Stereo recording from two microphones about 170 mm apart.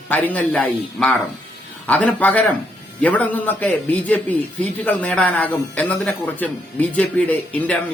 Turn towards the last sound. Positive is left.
turn(degrees=10)  # may be behind; listen again after turning